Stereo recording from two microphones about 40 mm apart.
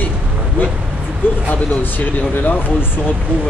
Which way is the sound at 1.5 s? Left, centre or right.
Left.